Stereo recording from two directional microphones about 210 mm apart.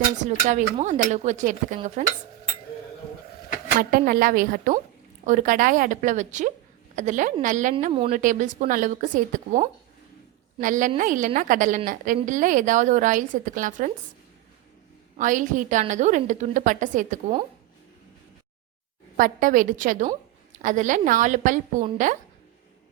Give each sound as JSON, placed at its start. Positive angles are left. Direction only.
{"t": 0.2, "sound": "a woman's voice", "side_deg": -35}
{"t": 3.8, "sound": "a woman's voice", "side_deg": -45}
{"t": 15.1, "sound": "a woman's voice", "side_deg": -40}
{"t": 19.1, "sound": "a woman's voice", "side_deg": -40}